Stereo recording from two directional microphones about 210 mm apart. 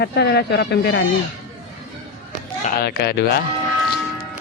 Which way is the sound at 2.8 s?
50° left (ahead or behind).